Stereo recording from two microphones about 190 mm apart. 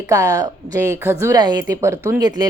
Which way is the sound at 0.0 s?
15° right (ahead or behind).